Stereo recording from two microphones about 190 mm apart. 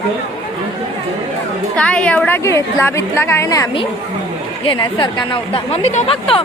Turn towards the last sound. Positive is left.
turn(degrees=30)  # may be behind; listen again after turning